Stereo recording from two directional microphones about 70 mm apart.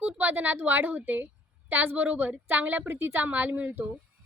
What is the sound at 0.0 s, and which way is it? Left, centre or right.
Speech, right.